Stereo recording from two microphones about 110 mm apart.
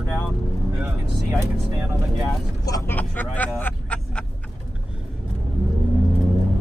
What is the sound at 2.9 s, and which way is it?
Speech, 15° left (ahead or behind).